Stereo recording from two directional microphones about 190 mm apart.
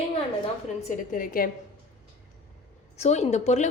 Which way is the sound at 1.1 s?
45° left (ahead or behind).